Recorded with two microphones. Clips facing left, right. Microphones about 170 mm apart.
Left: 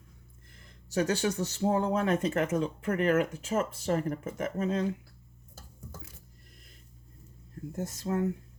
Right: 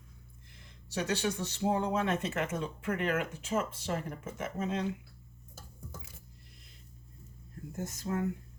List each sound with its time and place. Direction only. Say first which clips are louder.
0.4 s speech: left 2 dB; 45° left (ahead or behind)
7.9 s speech: left 3 dB; 35° left (ahead or behind)